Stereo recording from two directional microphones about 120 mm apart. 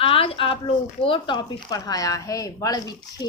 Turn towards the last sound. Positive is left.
turn(degrees=30)  # may be behind; listen again after turning